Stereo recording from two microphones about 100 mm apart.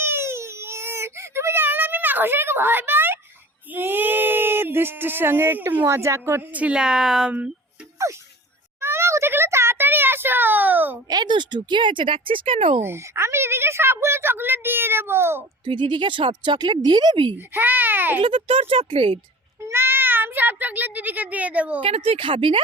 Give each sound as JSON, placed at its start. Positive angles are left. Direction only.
{"t": 0.0, "sound": "baby cry", "side_deg": -25}
{"t": 3.7, "sound": "speech", "side_deg": -20}
{"t": 6.6, "sound": "speech", "side_deg": -10}
{"t": 8.1, "sound": "speech", "side_deg": -35}
{"t": 8.8, "sound": "a sound", "side_deg": -25}
{"t": 11.1, "sound": "speech", "side_deg": -50}
{"t": 12.8, "sound": "speech", "side_deg": -25}
{"t": 15.6, "sound": "speech", "side_deg": -50}
{"t": 17.3, "sound": "speech", "side_deg": -20}
{"t": 18.2, "sound": "speech", "side_deg": -65}
{"t": 19.6, "sound": "a child's voice", "side_deg": -25}
{"t": 21.8, "sound": "speech", "side_deg": -80}